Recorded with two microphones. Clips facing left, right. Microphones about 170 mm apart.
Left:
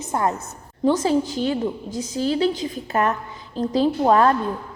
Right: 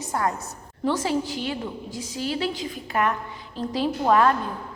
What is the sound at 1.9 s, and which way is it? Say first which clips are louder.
Speech: left 6 dB; 20° left (ahead or behind).